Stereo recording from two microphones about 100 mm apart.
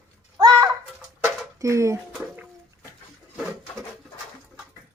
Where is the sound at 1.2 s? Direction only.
30° right (ahead or behind).